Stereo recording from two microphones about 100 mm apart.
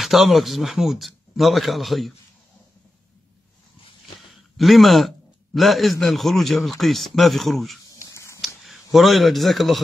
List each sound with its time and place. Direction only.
0.0 s a man's voice: centre (ahead or behind)
4.6 s a man's voice: centre (ahead or behind)
7.9 s a sound: 30° left (ahead or behind)
8.6 s a man's voice: centre (ahead or behind)